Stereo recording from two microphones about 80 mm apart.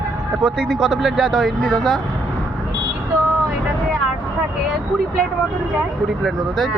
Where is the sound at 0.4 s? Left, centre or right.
Centre.